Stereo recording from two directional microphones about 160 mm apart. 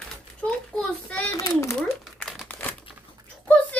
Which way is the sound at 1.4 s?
20° left (ahead or behind).